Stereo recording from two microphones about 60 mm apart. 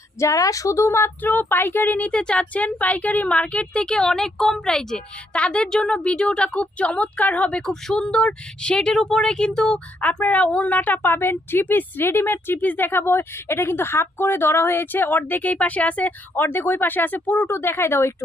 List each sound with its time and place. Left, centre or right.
0.2 s a woman's voice: left
1.2 s a woman's voice: left; by 9.8 s centre
10.0 s speech: left
17.5 s speech: left